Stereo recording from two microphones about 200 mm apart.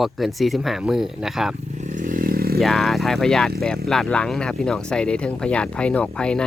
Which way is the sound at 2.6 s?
Centre (ahead or behind).